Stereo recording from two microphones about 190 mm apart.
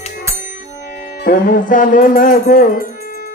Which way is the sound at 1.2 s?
45° left (ahead or behind).